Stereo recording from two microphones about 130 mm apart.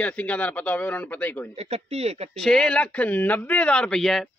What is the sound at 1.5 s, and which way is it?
Speech, 55° right (ahead or behind).